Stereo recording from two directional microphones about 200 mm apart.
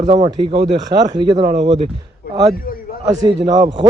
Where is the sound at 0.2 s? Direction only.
20° right (ahead or behind).